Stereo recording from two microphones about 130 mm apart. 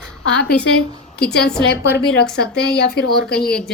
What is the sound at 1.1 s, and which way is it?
Speech, 5° left (ahead or behind).